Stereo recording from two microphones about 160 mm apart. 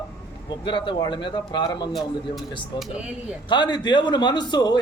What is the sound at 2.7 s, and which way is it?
A man's voice, 25° left (ahead or behind).